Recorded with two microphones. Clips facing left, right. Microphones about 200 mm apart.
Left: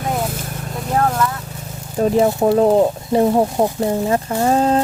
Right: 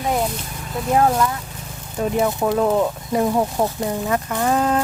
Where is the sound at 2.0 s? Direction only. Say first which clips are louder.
Left 5 dB; 35° left (ahead or behind).